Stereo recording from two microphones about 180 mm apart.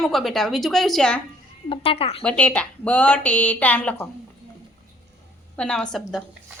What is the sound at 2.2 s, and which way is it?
Speech, 5° left (ahead or behind).